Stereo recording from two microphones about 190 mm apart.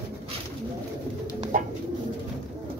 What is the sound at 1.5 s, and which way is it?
Bird, 45° right (ahead or behind).